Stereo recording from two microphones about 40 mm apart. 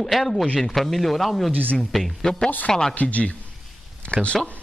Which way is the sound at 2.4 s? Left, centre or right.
Left.